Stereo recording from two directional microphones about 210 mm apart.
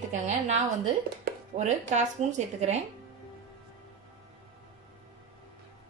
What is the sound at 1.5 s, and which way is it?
Speech, 35° right (ahead or behind).